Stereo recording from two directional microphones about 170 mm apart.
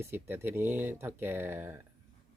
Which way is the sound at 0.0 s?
15° right (ahead or behind).